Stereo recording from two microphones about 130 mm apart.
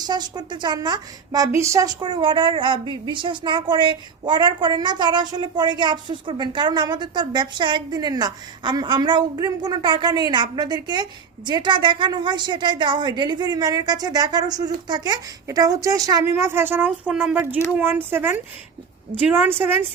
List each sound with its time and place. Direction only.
0.0 s a woman's voice: 35° right (ahead or behind)
2.0 s a woman's voice: 40° right (ahead or behind); by 19.9 s 15° right (ahead or behind)